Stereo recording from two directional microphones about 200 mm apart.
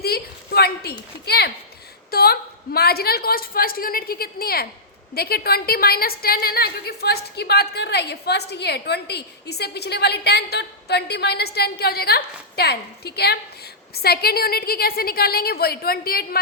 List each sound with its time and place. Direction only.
0.0 s a woman's voice: 50° left (ahead or behind)